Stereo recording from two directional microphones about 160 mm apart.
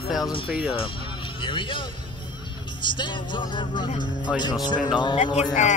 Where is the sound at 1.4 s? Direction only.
30° left (ahead or behind).